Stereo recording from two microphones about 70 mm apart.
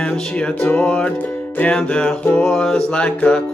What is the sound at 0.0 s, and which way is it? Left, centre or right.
Music, centre.